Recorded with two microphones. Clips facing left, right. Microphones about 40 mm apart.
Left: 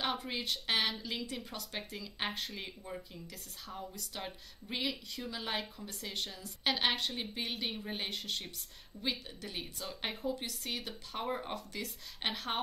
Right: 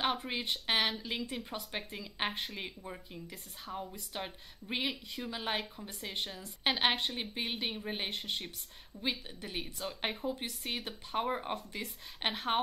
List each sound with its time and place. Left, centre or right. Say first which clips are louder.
0.3 s speech: right 1 dB; centre
10.2 s speech: even; right